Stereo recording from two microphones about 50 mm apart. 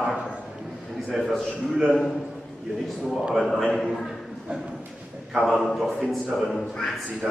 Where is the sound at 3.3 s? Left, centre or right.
Centre.